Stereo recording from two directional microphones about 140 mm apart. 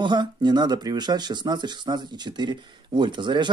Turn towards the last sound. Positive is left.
turn(degrees=-35)  # may be behind; listen again after turning